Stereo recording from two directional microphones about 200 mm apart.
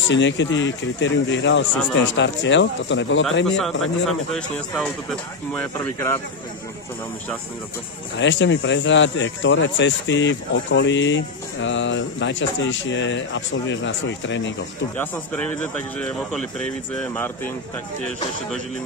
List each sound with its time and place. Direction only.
0.1 s speech: 65° left (ahead or behind)
3.5 s speech: centre (ahead or behind)
8.2 s speech: 65° left (ahead or behind)
15.0 s speech: 10° left (ahead or behind)